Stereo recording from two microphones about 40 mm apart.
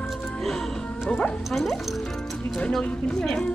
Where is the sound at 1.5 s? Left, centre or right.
Centre.